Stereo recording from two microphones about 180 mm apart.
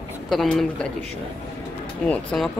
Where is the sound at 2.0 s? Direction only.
Centre (ahead or behind).